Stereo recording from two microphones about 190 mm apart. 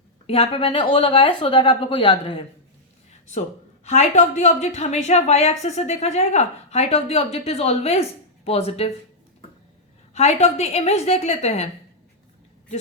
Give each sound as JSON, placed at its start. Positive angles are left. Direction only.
{"t": 0.3, "sound": "a woman's voice", "side_deg": 30}
{"t": 3.8, "sound": "speech", "side_deg": 35}
{"t": 10.2, "sound": "speech", "side_deg": 35}